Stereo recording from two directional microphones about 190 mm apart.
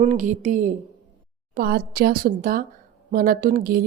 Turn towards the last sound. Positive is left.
turn(degrees=-50)  # may be behind; listen again after turning